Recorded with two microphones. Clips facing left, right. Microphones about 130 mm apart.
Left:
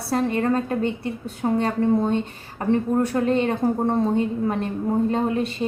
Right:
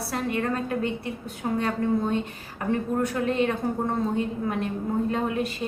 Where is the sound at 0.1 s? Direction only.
35° left (ahead or behind).